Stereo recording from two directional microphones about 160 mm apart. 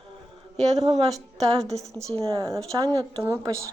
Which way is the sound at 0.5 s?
45° right (ahead or behind).